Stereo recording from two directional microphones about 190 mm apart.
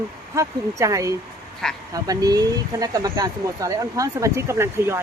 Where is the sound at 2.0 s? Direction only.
20° right (ahead or behind).